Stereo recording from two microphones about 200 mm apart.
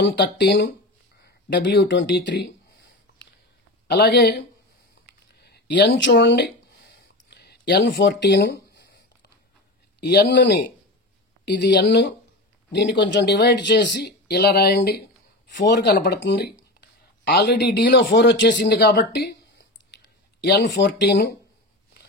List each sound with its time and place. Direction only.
0.0 s speech: 55° left (ahead or behind)
3.8 s speech: 55° left (ahead or behind)
5.4 s a sound: 55° left (ahead or behind)
9.9 s speech: 55° left (ahead or behind)
20.4 s speech: 60° left (ahead or behind)